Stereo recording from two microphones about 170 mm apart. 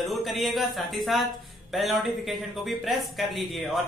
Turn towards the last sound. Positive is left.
turn(degrees=0)  # may be behind; listen again after turning